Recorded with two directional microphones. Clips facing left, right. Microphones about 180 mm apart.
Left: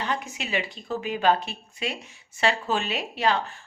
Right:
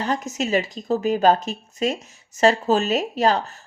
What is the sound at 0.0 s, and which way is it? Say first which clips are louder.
A woman's voice: right 6 dB; 40° right (ahead or behind).